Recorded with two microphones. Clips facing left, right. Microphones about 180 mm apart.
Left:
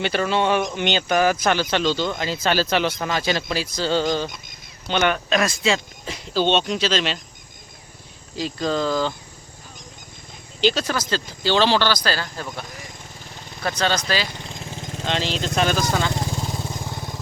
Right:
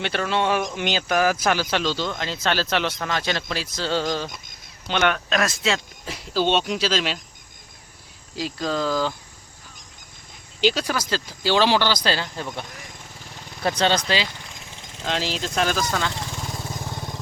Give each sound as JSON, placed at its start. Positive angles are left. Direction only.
{"t": 0.0, "sound": "speech", "side_deg": 0}
{"t": 8.4, "sound": "speech", "side_deg": -5}
{"t": 10.6, "sound": "speech", "side_deg": -10}
{"t": 13.6, "sound": "speech", "side_deg": -30}
{"t": 14.3, "sound": "vehicle", "side_deg": 25}
{"t": 15.0, "sound": "speech", "side_deg": -5}
{"t": 16.5, "sound": "vehicle", "side_deg": 5}